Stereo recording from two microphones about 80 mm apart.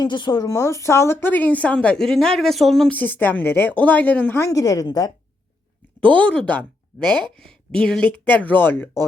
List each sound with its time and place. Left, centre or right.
0.0 s speech: left
0.5 s speech: left
1.3 s speech: left; by 2.9 s centre
2.9 s speech: left
4.4 s a woman's voice: left
6.0 s speech: centre